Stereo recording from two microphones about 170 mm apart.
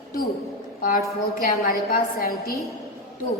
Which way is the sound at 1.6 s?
55° left (ahead or behind).